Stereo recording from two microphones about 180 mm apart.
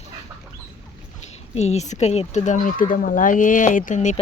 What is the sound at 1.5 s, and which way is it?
Speech, 35° left (ahead or behind).